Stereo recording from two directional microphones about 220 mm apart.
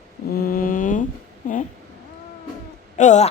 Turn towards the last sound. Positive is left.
turn(degrees=30)  # may be behind; listen again after turning